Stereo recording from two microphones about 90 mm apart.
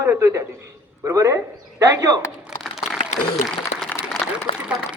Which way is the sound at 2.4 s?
5° right (ahead or behind).